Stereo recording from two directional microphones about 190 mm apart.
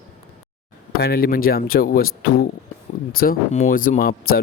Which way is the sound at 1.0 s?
55° left (ahead or behind).